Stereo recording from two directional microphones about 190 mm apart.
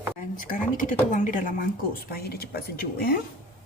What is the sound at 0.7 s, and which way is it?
Speech, 45° left (ahead or behind).